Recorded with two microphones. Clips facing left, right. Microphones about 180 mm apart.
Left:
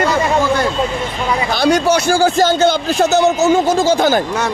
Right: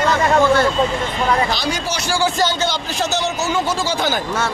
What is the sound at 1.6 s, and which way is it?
A man's voice, 60° left (ahead or behind).